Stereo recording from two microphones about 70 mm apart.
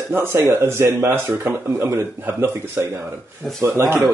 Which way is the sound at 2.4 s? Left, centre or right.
Right.